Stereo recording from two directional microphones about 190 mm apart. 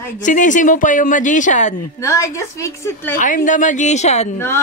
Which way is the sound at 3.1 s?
45° left (ahead or behind).